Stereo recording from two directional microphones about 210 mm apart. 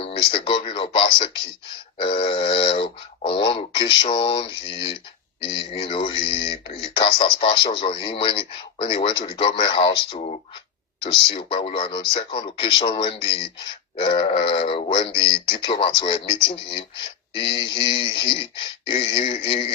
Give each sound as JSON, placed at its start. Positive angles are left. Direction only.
{"t": 0.0, "sound": "speech", "side_deg": 25}